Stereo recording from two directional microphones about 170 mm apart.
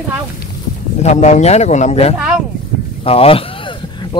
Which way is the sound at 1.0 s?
40° left (ahead or behind).